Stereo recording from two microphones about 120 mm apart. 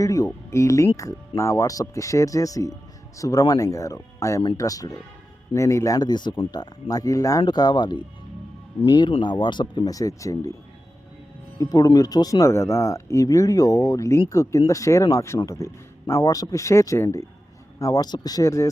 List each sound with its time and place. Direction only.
0.0 s speech: 30° left (ahead or behind)
11.6 s speech: 30° left (ahead or behind)